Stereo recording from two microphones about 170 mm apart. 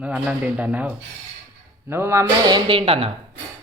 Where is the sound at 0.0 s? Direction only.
10° right (ahead or behind); by 3.1 s 35° right (ahead or behind).